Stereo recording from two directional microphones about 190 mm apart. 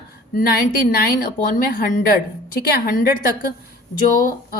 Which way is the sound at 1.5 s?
50° left (ahead or behind).